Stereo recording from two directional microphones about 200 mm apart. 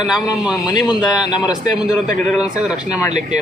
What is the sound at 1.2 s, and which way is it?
Speech, 20° left (ahead or behind).